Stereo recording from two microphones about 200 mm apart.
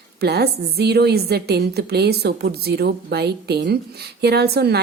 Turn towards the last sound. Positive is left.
turn(degrees=-55)  # may be behind; listen again after turning